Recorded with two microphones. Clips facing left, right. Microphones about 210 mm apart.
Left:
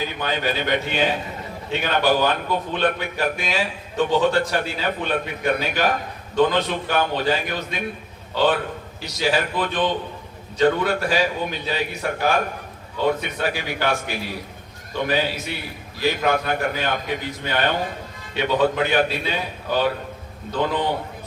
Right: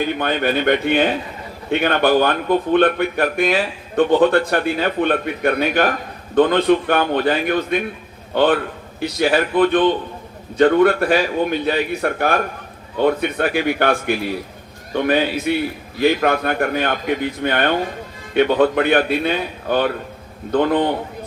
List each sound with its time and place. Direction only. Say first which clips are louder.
0.0 s a man's voice: right 6 dB; 55° right (ahead or behind)